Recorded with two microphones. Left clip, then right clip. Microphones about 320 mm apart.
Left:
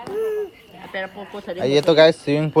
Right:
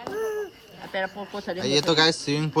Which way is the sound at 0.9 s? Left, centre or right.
Right.